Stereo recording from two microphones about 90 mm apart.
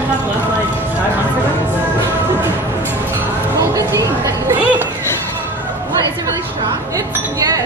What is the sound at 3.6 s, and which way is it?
Speech, 35° right (ahead or behind).